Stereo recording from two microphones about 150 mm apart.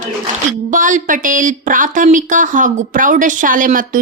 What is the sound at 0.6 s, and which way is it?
A woman's voice, 60° right (ahead or behind).